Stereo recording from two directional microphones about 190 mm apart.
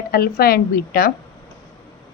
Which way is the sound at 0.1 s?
55° left (ahead or behind).